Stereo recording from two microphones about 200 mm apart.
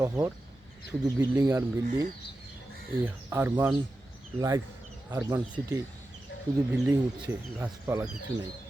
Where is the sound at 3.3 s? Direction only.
10° right (ahead or behind).